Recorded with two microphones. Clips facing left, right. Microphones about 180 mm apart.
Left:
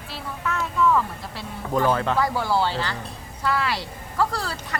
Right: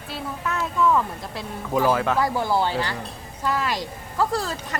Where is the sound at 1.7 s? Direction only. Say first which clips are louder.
Right 1 dB; 5° right (ahead or behind).